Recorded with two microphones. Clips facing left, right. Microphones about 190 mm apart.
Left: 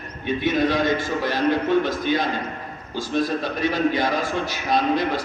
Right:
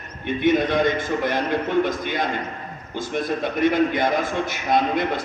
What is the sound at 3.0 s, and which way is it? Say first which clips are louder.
A man's voice: left 1 dB; 20° right (ahead or behind).